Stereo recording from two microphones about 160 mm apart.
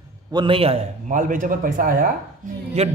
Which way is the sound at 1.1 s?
55° right (ahead or behind).